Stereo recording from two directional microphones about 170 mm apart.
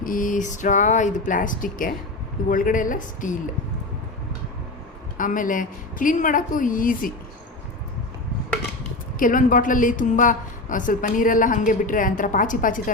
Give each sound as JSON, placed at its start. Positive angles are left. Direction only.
{"t": 0.0, "sound": "a woman's voice", "side_deg": 50}
{"t": 5.1, "sound": "a woman's voice", "side_deg": 50}
{"t": 9.1, "sound": "a woman's voice", "side_deg": 50}